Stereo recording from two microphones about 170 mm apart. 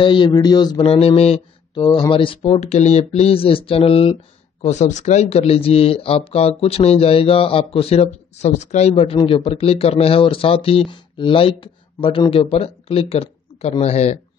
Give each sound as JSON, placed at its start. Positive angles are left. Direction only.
{"t": 0.0, "sound": "speech", "side_deg": 30}
{"t": 1.8, "sound": "speech", "side_deg": 25}